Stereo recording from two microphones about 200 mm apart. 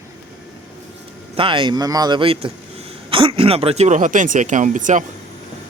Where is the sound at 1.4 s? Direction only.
25° right (ahead or behind).